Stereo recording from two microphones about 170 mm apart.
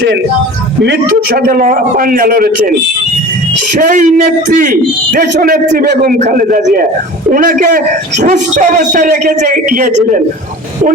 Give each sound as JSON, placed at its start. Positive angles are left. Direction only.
{"t": 1.4, "sound": "a man's voice", "side_deg": -55}
{"t": 3.8, "sound": "a man's voice", "side_deg": -50}
{"t": 6.2, "sound": "a man's voice", "side_deg": -55}